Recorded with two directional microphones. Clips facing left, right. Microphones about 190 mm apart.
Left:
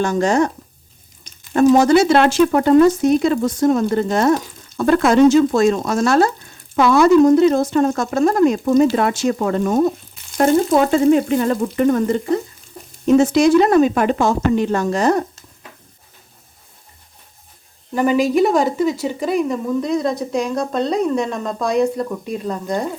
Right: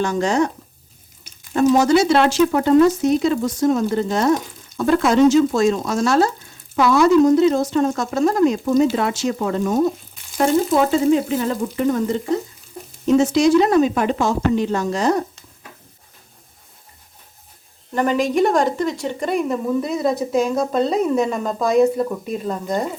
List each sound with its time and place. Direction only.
0.0 s speech: 50° left (ahead or behind)
1.5 s speech: 55° left (ahead or behind)
11.1 s speech: 55° left (ahead or behind)
17.9 s a woman's voice: 5° left (ahead or behind)